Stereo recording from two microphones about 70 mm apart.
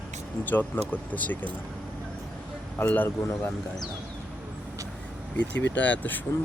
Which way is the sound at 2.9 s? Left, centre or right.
Left.